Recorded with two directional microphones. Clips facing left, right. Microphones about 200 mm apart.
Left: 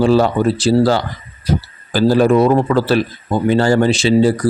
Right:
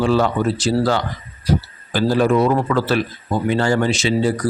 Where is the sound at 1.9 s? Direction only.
35° left (ahead or behind).